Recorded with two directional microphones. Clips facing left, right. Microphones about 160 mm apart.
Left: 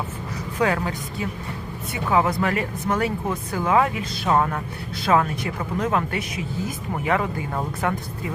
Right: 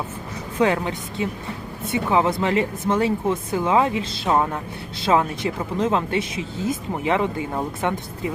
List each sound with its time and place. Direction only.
0.6 s speech: 25° right (ahead or behind)